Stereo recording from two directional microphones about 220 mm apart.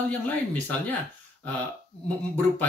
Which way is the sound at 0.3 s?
5° left (ahead or behind).